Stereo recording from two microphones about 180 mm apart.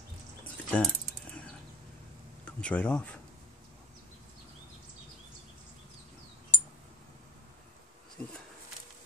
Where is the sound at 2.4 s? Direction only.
5° left (ahead or behind).